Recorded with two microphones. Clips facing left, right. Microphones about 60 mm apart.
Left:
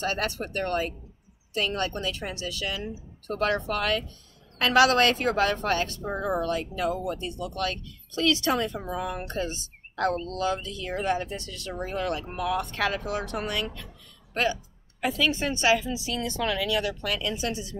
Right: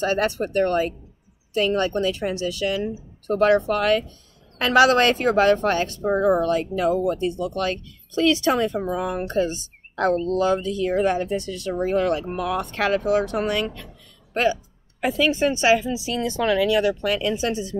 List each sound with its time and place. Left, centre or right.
0.0 s a woman's voice: right
6.0 s speech: right
7.2 s a woman's voice: centre